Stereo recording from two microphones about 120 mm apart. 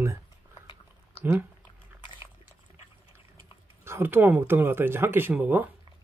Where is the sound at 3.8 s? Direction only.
20° right (ahead or behind).